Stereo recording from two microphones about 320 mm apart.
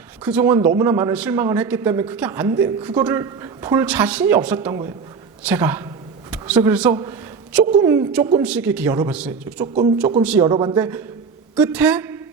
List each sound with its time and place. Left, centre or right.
0.3 s a man's voice: centre
6.3 s a sound: centre
7.6 s a woman's voice: right
7.9 s a man's voice: centre